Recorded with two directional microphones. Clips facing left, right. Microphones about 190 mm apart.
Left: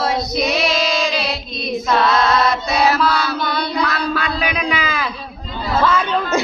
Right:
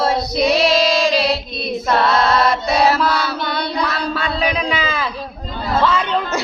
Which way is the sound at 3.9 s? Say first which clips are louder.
Left 1 dB; 30° right (ahead or behind).